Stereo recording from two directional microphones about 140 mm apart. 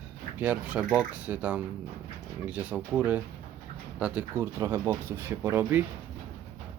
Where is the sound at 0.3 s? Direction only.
10° right (ahead or behind).